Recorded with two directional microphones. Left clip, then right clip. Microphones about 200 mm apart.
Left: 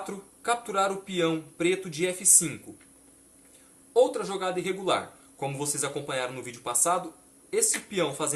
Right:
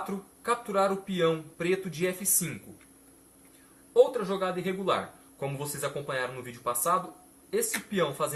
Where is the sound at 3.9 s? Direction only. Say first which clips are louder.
Even; 45° left (ahead or behind).